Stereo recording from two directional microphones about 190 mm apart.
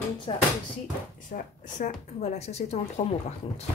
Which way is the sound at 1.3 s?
50° left (ahead or behind).